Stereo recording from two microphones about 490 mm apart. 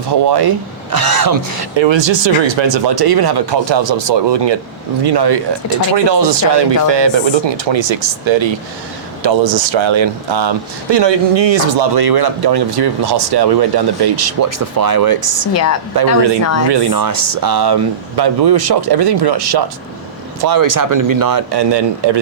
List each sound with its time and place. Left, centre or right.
0.1 s speech: right
1.7 s speech: right